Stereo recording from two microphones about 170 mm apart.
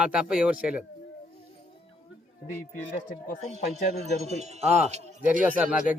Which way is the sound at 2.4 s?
60° left (ahead or behind).